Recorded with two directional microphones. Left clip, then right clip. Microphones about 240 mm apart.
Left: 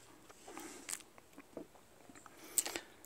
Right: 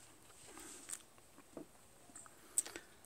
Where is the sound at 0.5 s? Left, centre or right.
Left.